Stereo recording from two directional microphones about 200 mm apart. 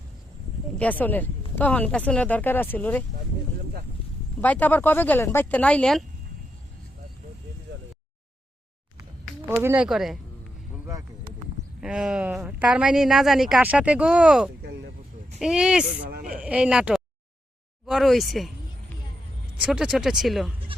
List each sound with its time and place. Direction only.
0.8 s speech: 10° left (ahead or behind)
4.4 s speech: 10° left (ahead or behind)
9.5 s speech: 10° right (ahead or behind)
11.8 s speech: 5° right (ahead or behind)
14.6 s a sound: 55° right (ahead or behind)
15.4 s speech: 5° right (ahead or behind)
16.0 s speech: 50° right (ahead or behind)
16.4 s speech: 5° right (ahead or behind)
17.8 s a sound: centre (ahead or behind)
19.6 s speech: 5° right (ahead or behind)